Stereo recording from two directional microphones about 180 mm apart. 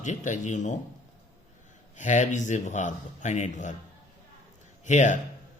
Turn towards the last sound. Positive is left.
turn(degrees=40)  # may be behind; listen again after turning